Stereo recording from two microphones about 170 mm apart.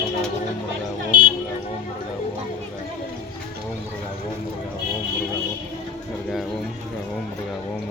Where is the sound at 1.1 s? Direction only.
55° right (ahead or behind).